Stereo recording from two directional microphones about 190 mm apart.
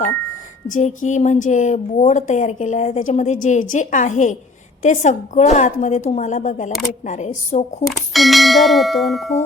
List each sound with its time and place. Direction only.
0.7 s a woman's voice: 40° left (ahead or behind)
7.9 s bell: centre (ahead or behind)